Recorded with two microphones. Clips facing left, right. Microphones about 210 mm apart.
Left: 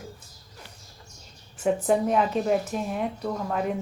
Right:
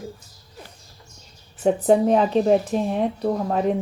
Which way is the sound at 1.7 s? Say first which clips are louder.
Right 6 dB; 35° right (ahead or behind).